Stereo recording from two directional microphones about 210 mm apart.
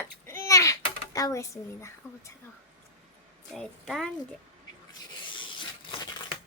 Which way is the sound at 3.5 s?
Centre (ahead or behind).